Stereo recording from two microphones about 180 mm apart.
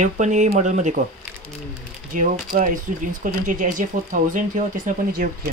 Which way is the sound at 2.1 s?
50° right (ahead or behind).